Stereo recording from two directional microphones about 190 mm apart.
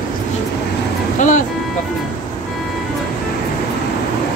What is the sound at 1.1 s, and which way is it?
Speech, 40° left (ahead or behind).